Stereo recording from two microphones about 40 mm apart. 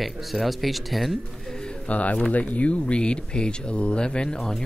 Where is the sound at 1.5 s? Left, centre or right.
Centre.